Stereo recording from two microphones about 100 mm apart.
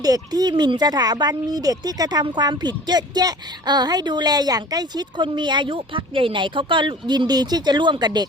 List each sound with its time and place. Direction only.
0.0 s a woman's voice: 40° right (ahead or behind)